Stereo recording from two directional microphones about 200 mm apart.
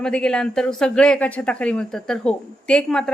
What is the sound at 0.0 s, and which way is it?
A woman's voice, 5° left (ahead or behind).